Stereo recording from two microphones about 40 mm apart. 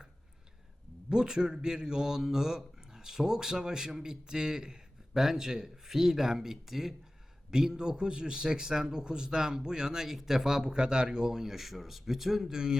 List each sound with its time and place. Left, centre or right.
1.1 s a man's voice: centre